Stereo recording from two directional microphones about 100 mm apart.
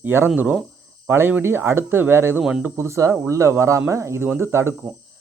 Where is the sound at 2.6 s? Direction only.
25° right (ahead or behind).